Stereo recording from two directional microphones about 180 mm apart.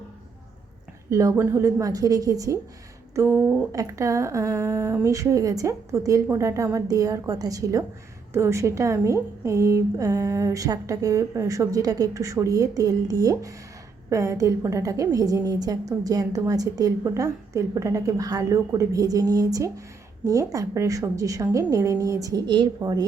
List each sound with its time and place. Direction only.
1.1 s a woman's voice: 20° right (ahead or behind)
3.7 s a woman's voice: 20° right (ahead or behind)